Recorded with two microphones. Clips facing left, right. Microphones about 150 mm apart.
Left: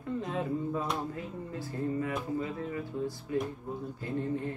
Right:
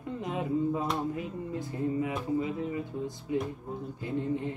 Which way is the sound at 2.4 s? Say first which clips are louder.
Right 3 dB; 20° right (ahead or behind).